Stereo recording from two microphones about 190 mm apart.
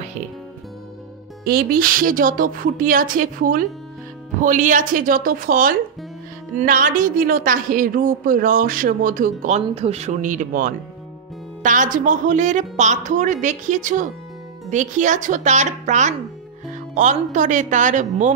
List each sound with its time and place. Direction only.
1.4 s a woman's voice: 55° right (ahead or behind)